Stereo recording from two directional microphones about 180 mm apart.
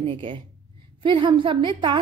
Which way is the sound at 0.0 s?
30° right (ahead or behind).